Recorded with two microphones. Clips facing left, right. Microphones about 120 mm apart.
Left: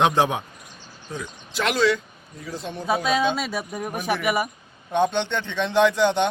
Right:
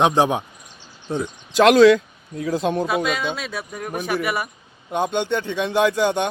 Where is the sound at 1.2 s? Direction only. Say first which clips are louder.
Right 11 dB; 90° right.